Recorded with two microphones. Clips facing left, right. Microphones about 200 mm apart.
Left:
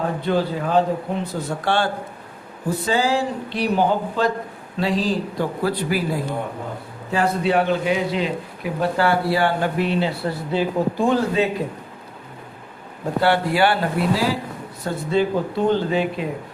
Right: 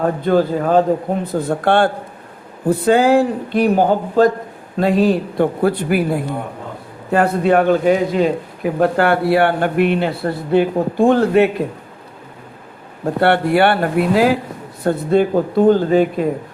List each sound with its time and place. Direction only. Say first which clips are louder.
0.0 s a man's voice: right 6 dB; 50° right (ahead or behind)
13.1 s a man's voice: right 4 dB; 60° right (ahead or behind)